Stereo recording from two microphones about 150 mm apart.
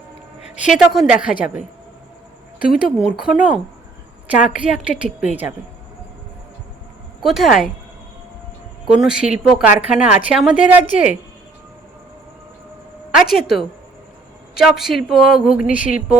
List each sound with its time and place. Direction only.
0.4 s a sound: 50° left (ahead or behind)
0.7 s a woman's voice: 5° right (ahead or behind)
2.6 s speech: 75° left (ahead or behind)
2.8 s a woman's voice: 5° right (ahead or behind)
7.2 s a woman's voice: centre (ahead or behind)
8.9 s a woman's voice: 5° right (ahead or behind)
13.3 s a woman's voice: centre (ahead or behind)
15.7 s speech: 60° left (ahead or behind)